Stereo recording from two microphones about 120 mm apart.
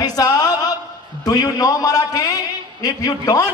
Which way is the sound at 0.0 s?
30° left (ahead or behind).